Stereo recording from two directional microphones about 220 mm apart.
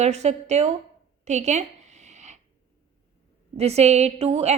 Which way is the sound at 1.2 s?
30° right (ahead or behind).